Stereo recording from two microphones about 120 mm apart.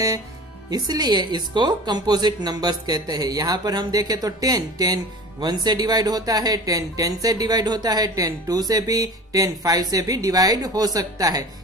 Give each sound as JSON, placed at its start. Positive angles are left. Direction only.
{"t": 0.7, "sound": "speech", "side_deg": -35}